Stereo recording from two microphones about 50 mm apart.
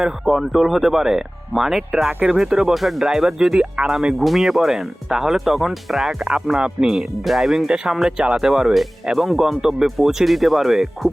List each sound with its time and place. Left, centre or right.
0.3 s speech: centre
2.0 s speech: right
2.4 s speech: centre
6.8 s speech: centre